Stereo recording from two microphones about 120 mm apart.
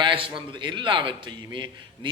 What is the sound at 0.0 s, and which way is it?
Speech, 45° right (ahead or behind).